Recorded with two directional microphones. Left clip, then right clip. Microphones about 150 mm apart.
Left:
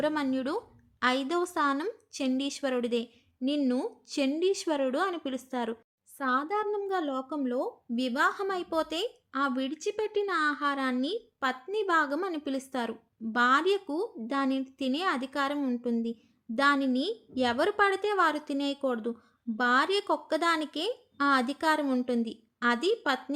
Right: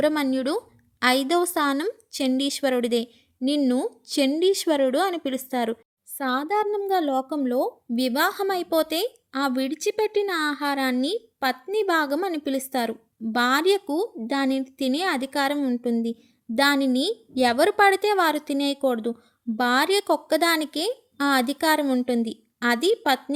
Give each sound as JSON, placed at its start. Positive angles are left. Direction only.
{"t": 0.0, "sound": "speech", "side_deg": -45}